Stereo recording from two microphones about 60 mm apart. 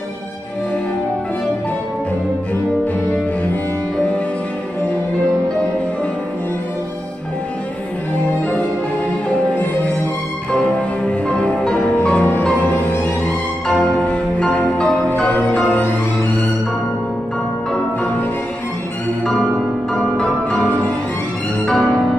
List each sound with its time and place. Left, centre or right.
10.5 s music: centre
12.7 s music: left
13.8 s music: centre
19.9 s music: centre
21.6 s music: centre